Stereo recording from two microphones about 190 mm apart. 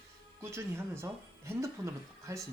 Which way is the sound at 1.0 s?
15° right (ahead or behind).